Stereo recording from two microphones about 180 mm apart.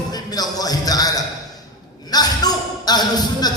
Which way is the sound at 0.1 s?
20° left (ahead or behind).